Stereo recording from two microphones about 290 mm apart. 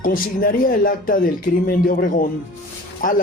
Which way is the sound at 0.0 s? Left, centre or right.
Left.